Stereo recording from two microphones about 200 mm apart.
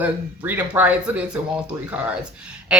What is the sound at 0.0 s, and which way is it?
Speech, 10° right (ahead or behind).